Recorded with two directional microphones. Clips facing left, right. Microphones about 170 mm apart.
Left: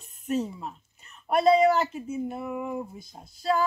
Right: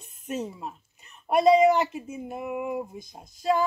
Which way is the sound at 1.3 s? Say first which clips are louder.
Right 2 dB; 15° right (ahead or behind).